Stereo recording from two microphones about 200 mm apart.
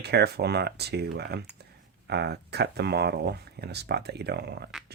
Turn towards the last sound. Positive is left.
turn(degrees=-55)  # may be behind; listen again after turning